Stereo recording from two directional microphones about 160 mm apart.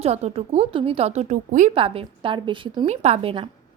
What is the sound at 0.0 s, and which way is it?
A woman's voice, 40° right (ahead or behind).